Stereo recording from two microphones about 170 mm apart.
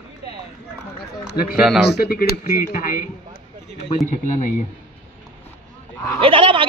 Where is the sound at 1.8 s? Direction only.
70° left (ahead or behind); by 4.5 s 45° left (ahead or behind).